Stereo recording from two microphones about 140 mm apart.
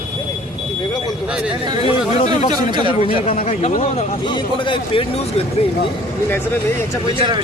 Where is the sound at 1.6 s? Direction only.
30° right (ahead or behind).